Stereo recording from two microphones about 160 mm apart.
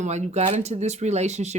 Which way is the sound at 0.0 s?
45° right (ahead or behind).